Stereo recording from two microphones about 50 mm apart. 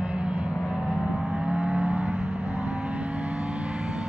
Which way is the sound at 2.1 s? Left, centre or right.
Left.